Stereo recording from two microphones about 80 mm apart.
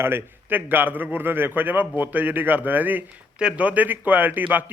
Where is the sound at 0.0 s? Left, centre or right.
Right.